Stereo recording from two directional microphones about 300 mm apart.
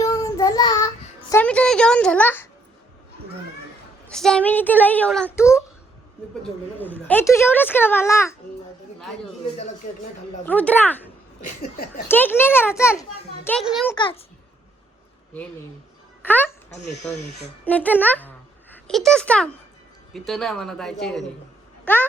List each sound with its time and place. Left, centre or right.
0.0 s child singing: centre
1.3 s a woman's voice: centre
4.1 s a woman's voice: centre
6.7 s a child's voice: centre
10.4 s a woman's voice: centre
11.4 s a sound: left
12.0 s a child's voice: centre
13.9 s a child's voice: centre
16.2 s speech: centre
17.7 s a woman's voice: centre